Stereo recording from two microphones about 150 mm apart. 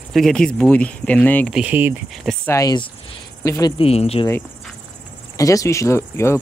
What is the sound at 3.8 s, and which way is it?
Speech, 40° left (ahead or behind).